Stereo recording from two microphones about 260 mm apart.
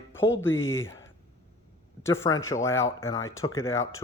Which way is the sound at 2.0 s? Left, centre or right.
Centre.